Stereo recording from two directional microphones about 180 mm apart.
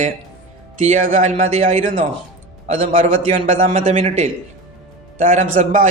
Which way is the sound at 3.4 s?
45° right (ahead or behind).